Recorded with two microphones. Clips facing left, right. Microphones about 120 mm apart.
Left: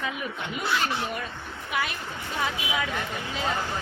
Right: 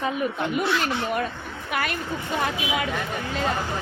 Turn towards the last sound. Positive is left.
turn(degrees=-60)  # may be behind; listen again after turning